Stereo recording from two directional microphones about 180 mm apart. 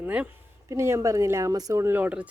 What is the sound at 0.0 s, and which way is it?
Speech, 5° right (ahead or behind).